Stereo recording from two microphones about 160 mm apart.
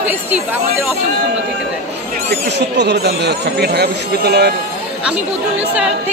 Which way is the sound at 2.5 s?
90° right.